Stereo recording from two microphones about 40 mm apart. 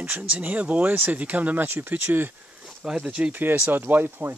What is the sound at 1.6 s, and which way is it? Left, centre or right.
Speech, right.